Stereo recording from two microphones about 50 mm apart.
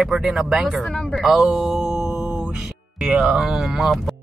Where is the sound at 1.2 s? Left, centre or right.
Centre.